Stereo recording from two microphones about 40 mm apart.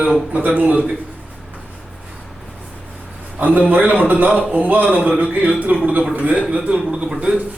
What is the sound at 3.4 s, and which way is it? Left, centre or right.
A man's voice, right.